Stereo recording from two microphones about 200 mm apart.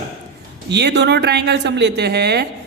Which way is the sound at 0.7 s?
60° right (ahead or behind).